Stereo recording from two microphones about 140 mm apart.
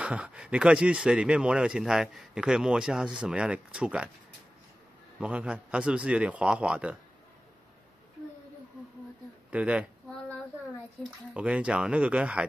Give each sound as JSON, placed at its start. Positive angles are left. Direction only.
{"t": 0.0, "sound": "speech", "side_deg": -10}
{"t": 5.2, "sound": "speech", "side_deg": -5}
{"t": 9.5, "sound": "speech", "side_deg": -10}
{"t": 11.3, "sound": "speech", "side_deg": -10}